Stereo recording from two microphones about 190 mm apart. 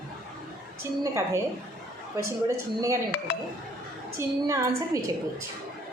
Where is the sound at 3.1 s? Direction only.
60° left (ahead or behind).